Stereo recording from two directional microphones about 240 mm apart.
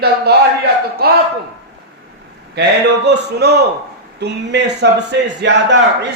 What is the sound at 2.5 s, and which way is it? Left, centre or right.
A man's voice, right.